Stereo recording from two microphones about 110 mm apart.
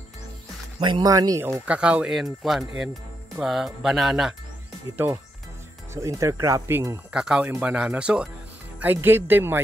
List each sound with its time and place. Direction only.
0.7 s speech: 45° right (ahead or behind)
1.0 s speech: 35° right (ahead or behind)
1.7 s speech: 10° right (ahead or behind)
4.9 s speech: 25° right (ahead or behind)
7.1 s speech: 10° right (ahead or behind)
9.0 s speech: 20° right (ahead or behind)